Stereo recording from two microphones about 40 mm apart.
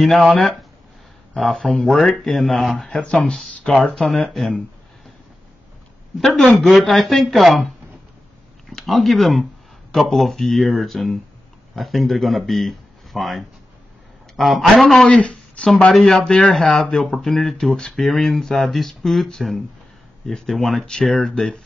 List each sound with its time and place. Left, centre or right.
0.0 s speech: centre
3.7 s speech: centre
4.1 s speech: centre
6.4 s speech: centre
8.8 s speech: centre
14.3 s a sound: centre
14.7 s speech: centre
15.2 s a sound: left
15.9 s speech: centre